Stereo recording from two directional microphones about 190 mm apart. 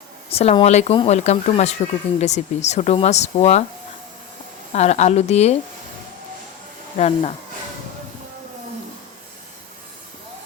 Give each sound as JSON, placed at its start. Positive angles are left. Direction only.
{"t": 0.3, "sound": "speech", "side_deg": 30}
{"t": 4.7, "sound": "speech", "side_deg": 35}
{"t": 6.9, "sound": "speech", "side_deg": 35}